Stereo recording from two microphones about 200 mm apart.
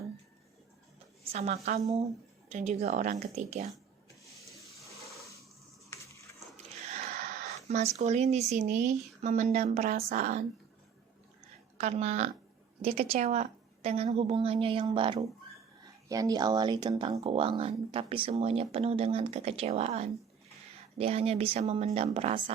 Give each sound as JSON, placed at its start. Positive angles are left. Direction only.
{"t": 1.2, "sound": "a woman's voice", "side_deg": -30}
{"t": 6.9, "sound": "a sound", "side_deg": -35}
{"t": 7.9, "sound": "speech", "side_deg": -35}
{"t": 11.8, "sound": "speech", "side_deg": -35}